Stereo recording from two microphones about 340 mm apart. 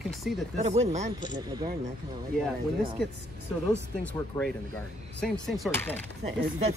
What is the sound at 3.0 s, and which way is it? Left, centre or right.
Speech, centre.